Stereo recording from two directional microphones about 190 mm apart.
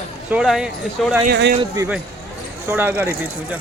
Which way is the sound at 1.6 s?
15° right (ahead or behind).